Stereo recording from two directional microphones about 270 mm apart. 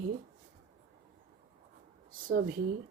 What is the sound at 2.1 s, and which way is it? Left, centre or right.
Speech, right.